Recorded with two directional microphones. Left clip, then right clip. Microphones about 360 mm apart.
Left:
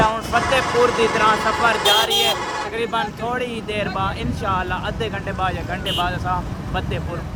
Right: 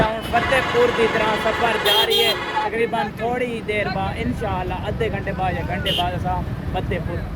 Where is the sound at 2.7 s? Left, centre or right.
Centre.